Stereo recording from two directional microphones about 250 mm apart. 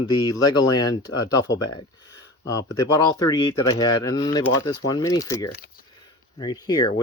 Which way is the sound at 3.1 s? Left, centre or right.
Centre.